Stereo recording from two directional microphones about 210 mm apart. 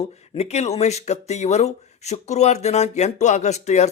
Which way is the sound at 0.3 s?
30° left (ahead or behind).